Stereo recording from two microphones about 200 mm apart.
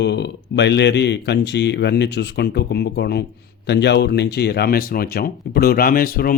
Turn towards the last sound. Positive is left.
turn(degrees=45)  # may be behind; listen again after turning